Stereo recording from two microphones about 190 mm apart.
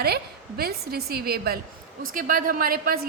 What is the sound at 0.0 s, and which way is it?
A woman's voice, 55° right (ahead or behind).